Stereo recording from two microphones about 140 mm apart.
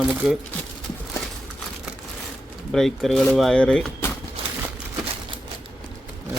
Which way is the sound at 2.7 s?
Centre (ahead or behind).